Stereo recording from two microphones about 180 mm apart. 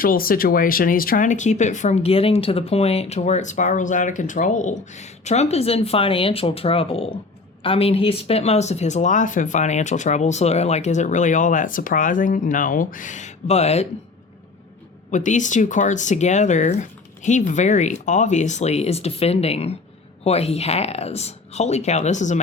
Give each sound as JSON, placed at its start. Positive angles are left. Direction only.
{"t": 0.0, "sound": "speech", "side_deg": 55}
{"t": 15.1, "sound": "speech", "side_deg": 45}